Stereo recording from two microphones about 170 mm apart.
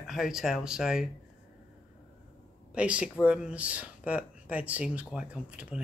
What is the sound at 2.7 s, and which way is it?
Speech, 5° right (ahead or behind).